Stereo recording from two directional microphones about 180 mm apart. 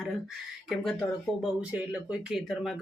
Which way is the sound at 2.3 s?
Centre (ahead or behind).